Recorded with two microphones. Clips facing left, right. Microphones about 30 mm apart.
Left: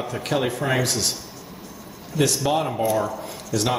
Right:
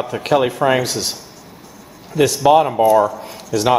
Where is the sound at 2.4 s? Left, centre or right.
Right.